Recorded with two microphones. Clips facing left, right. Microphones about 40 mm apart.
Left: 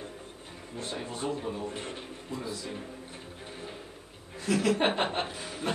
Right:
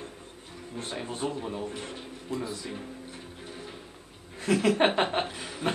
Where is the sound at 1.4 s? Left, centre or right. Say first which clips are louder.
Right 1 dB; centre.